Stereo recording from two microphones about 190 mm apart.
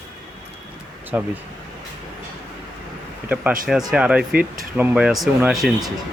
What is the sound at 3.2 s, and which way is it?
Speech, 5° right (ahead or behind).